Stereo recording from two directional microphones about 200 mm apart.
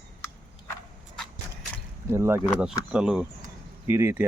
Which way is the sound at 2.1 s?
15° right (ahead or behind).